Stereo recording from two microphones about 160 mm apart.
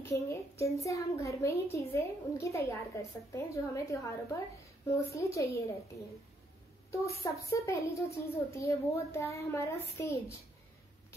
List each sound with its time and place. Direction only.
0.0 s a child's voice: 15° left (ahead or behind)
6.9 s a child's voice: 20° left (ahead or behind)